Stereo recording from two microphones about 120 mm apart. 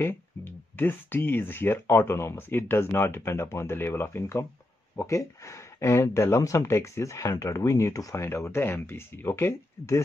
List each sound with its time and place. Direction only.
0.0 s speech: 20° left (ahead or behind)